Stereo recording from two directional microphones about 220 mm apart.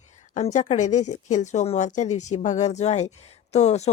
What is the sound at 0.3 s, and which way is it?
Speech, 30° left (ahead or behind).